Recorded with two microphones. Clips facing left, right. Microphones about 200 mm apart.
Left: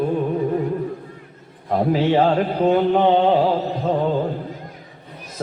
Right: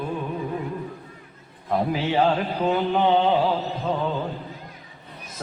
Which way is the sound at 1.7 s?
40° left (ahead or behind).